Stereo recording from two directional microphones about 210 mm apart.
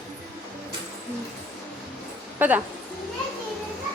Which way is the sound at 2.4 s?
10° right (ahead or behind).